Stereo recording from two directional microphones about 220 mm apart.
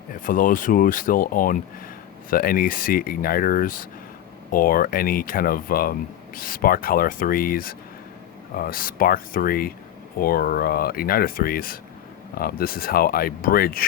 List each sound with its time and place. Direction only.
0.1 s speech: 40° left (ahead or behind)